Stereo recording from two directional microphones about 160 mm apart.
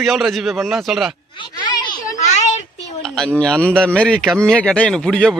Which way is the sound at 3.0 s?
5° left (ahead or behind).